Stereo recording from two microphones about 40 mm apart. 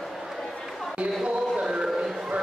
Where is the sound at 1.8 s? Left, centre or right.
Centre.